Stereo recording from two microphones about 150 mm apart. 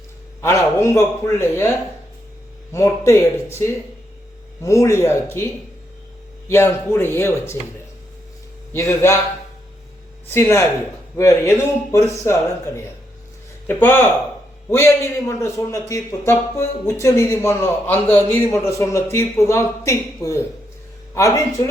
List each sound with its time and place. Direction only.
0.4 s a man's voice: 20° left (ahead or behind)
2.7 s a man's voice: 20° left (ahead or behind)
6.5 s a man's voice: 15° left (ahead or behind)
8.7 s a man's voice: 15° left (ahead or behind)
10.3 s a man's voice: 20° left (ahead or behind)